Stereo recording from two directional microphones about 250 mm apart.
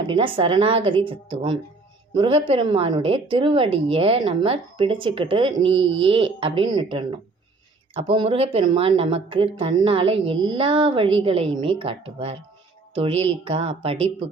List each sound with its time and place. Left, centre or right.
0.1 s speech: right